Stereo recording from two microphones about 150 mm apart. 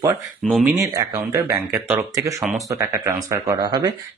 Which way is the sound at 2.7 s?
20° right (ahead or behind).